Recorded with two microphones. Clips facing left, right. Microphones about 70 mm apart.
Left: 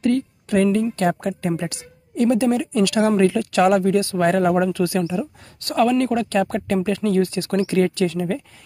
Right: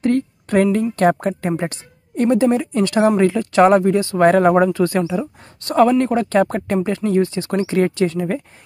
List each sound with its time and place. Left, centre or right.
0.0 s a sound: right
0.9 s speech: right
5.2 s speech: right